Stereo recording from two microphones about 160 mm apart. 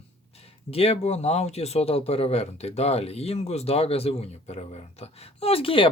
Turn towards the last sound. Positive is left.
turn(degrees=35)  # may be behind; listen again after turning